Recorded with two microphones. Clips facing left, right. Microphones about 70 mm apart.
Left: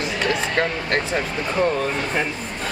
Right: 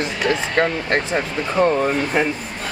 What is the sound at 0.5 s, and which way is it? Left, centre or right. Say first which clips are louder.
Speech: right 3 dB; right.